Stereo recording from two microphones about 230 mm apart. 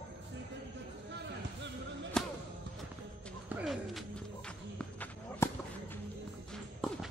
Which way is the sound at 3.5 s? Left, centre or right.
Centre.